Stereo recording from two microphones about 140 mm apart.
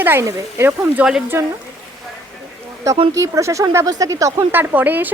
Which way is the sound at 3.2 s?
20° right (ahead or behind).